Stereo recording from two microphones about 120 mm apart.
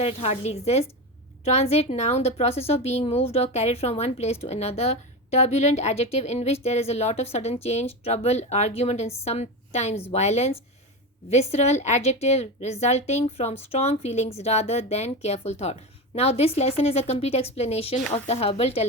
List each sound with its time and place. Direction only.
0.0 s a woman's voice: 55° left (ahead or behind)